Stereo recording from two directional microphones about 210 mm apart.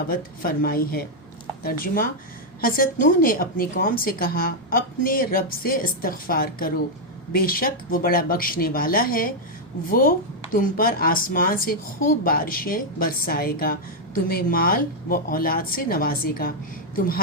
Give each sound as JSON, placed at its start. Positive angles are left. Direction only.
{"t": 0.1, "sound": "a woman's voice", "side_deg": 45}